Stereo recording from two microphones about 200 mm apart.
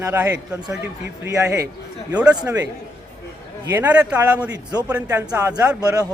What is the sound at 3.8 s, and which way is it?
A man's voice, 5° right (ahead or behind).